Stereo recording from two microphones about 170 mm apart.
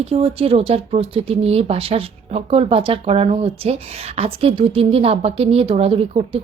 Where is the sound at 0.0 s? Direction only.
35° right (ahead or behind).